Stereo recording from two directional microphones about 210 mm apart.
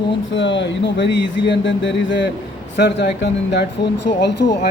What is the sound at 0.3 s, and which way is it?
Speech, 60° left (ahead or behind).